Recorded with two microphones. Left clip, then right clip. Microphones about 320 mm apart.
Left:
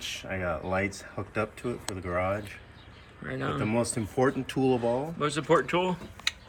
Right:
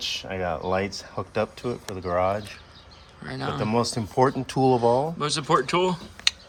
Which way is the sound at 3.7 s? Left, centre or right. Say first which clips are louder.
Right 4 dB; centre.